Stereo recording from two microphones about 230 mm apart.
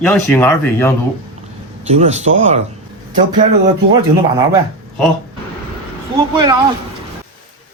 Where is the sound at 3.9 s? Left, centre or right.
Centre.